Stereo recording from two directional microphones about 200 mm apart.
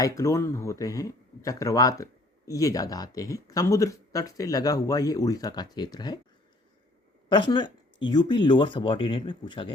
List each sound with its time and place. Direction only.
0.0 s speech: 15° left (ahead or behind)
7.3 s speech: 20° left (ahead or behind)